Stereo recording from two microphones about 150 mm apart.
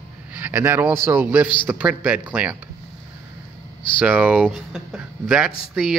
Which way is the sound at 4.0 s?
10° right (ahead or behind).